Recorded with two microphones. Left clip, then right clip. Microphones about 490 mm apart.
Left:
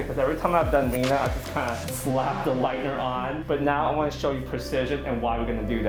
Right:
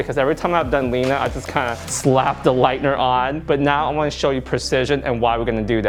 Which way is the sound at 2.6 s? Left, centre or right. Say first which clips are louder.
Right 10 dB; right.